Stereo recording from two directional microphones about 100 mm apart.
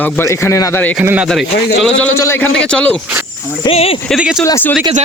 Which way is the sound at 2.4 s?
10° left (ahead or behind).